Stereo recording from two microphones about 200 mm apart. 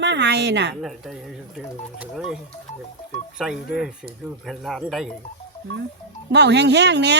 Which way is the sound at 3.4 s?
5° right (ahead or behind).